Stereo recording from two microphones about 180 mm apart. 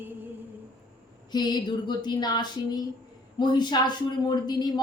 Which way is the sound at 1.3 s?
25° left (ahead or behind).